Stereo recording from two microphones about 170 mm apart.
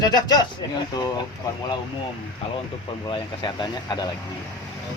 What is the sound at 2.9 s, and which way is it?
Speech, 30° left (ahead or behind).